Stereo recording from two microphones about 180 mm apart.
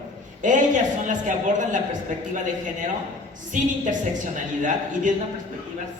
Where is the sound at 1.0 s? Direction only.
45° right (ahead or behind).